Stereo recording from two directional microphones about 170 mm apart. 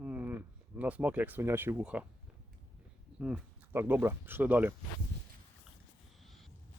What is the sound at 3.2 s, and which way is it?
Speech, 5° right (ahead or behind).